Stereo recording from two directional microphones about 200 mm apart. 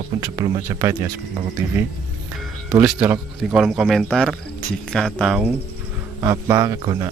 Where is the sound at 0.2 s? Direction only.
15° right (ahead or behind).